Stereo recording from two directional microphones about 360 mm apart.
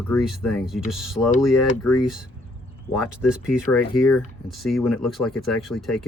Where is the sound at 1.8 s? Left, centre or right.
Left.